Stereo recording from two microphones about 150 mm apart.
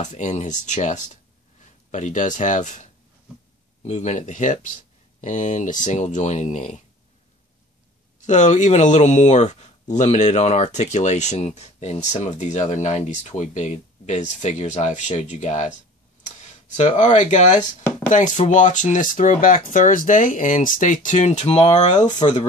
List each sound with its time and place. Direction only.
0.0 s speech: 55° left (ahead or behind)
8.2 s speech: 55° left (ahead or behind)